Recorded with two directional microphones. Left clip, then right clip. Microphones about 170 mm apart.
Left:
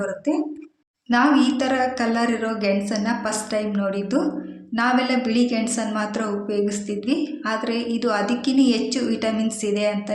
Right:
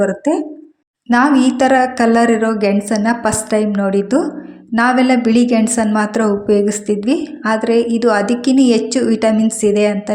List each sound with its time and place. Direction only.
1.1 s a woman's voice: 45° right (ahead or behind)